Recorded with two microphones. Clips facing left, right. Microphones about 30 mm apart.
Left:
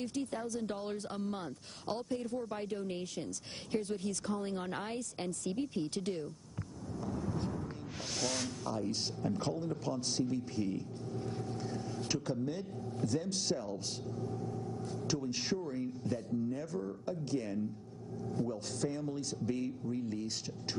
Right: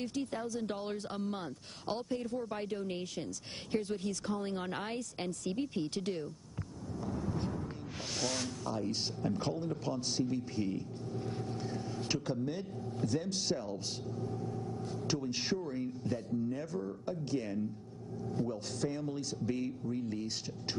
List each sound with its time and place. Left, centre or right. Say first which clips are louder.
0.0 s speech: right 1 dB; centre
7.0 s a sound: right 1 dB; centre
8.7 s speech: right 1 dB; centre
9.9 s speech: even; centre
11.2 s vehicle: right 1 dB; centre
13.3 s speech: even; centre